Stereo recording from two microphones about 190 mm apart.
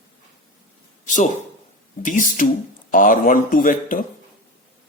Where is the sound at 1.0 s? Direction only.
40° left (ahead or behind).